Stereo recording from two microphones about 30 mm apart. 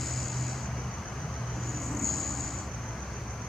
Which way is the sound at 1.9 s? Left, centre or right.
Centre.